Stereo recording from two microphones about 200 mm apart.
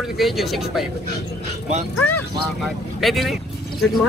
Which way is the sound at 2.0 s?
10° left (ahead or behind).